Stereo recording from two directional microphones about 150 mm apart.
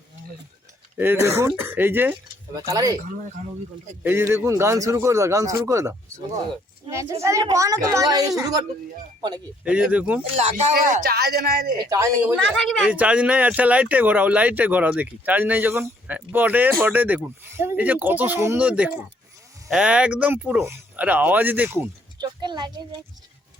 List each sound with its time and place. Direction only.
0.9 s a man's voice: 15° right (ahead or behind)
4.0 s a man's voice: 15° right (ahead or behind)
9.6 s speech: 5° right (ahead or behind)
10.3 s speech: 45° right (ahead or behind)
10.8 s speech: 65° right (ahead or behind); by 11.7 s 90° right
11.9 s a man's voice: 20° right (ahead or behind)
12.5 s speech: 5° left (ahead or behind)
12.9 s speech: 10° right (ahead or behind)
22.2 s a man's voice: 30° right (ahead or behind)